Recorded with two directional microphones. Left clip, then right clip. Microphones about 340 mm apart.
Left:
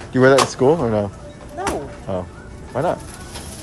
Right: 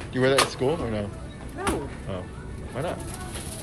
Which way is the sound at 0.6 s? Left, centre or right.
Left.